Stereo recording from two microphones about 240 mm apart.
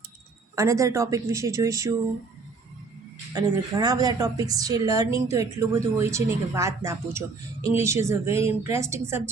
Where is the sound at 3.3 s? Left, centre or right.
Centre.